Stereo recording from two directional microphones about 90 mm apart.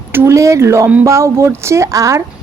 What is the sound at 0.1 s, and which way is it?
A woman's voice, 30° right (ahead or behind).